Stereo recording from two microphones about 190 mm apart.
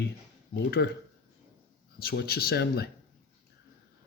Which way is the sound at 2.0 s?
55° left (ahead or behind).